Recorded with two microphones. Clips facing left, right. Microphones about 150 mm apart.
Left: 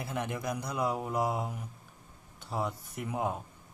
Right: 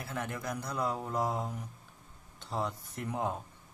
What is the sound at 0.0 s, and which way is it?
Speech, 15° left (ahead or behind).